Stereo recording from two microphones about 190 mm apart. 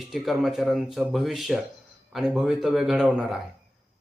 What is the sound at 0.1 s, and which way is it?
Speech, centre (ahead or behind).